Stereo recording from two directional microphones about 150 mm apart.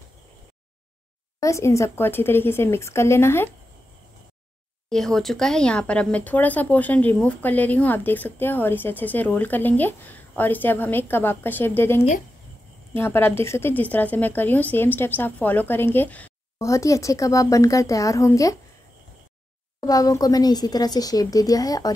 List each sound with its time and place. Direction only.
1.4 s speech: 20° left (ahead or behind)
4.8 s speech: centre (ahead or behind); by 18.6 s 20° left (ahead or behind)
19.8 s speech: 25° left (ahead or behind)